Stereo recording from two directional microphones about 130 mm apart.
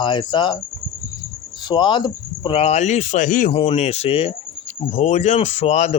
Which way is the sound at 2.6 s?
60° left (ahead or behind).